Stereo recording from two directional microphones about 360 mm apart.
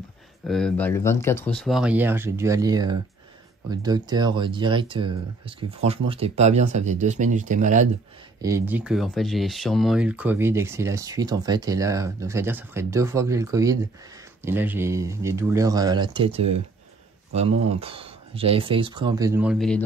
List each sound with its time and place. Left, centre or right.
0.4 s speech: centre; by 7.9 s right
8.4 s speech: centre